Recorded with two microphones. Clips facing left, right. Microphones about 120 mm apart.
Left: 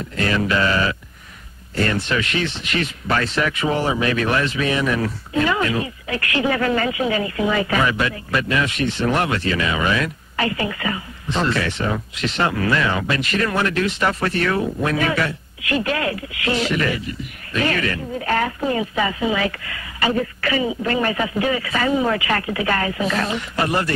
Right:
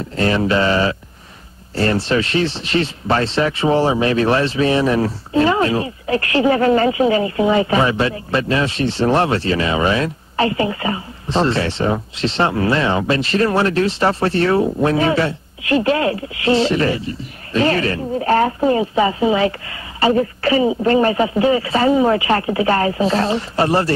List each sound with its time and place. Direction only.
0.0 s speech: 30° right (ahead or behind)